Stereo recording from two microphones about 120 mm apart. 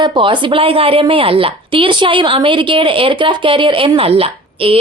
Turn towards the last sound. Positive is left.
turn(degrees=-50)  # may be behind; listen again after turning